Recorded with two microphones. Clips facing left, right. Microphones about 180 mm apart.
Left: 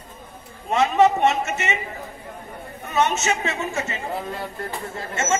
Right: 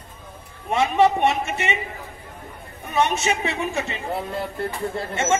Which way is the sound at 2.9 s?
15° right (ahead or behind).